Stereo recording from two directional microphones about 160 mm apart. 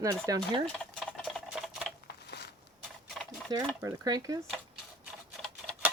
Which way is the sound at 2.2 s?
90° left.